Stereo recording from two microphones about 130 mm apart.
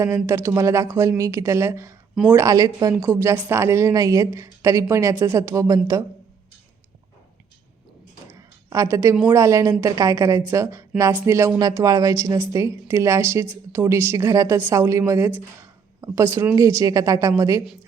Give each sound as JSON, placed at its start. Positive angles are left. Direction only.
{"t": 0.3, "sound": "a woman's voice", "side_deg": -20}
{"t": 8.3, "sound": "a sound", "side_deg": -25}
{"t": 9.3, "sound": "a woman's voice", "side_deg": -25}